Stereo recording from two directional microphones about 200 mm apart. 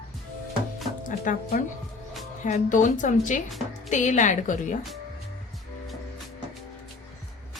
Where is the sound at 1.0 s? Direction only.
45° left (ahead or behind).